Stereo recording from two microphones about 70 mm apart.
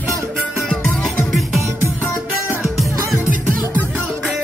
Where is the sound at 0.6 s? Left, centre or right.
Centre.